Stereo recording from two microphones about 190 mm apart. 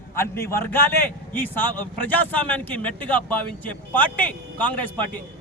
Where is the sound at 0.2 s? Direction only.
15° left (ahead or behind).